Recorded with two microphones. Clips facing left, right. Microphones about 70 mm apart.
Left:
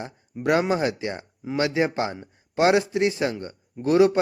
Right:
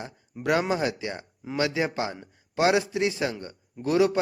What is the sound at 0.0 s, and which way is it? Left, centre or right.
Speech, left.